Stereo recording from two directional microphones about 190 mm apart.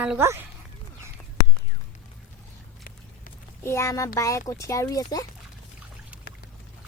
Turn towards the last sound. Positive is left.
turn(degrees=20)  # may be behind; listen again after turning